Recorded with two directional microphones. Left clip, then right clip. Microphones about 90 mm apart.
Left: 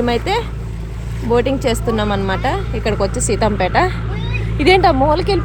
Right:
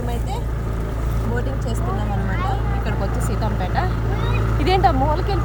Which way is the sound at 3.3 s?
60° left (ahead or behind).